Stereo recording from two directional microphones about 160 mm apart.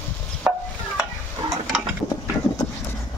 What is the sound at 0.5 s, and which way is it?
Stir, 10° right (ahead or behind).